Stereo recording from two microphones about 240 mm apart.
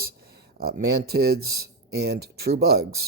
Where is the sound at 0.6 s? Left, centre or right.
Right.